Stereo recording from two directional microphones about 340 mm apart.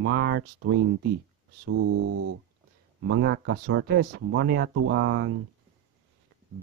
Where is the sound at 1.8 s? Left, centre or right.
Right.